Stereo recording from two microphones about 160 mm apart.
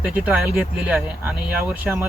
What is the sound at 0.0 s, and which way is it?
Speech, 5° right (ahead or behind).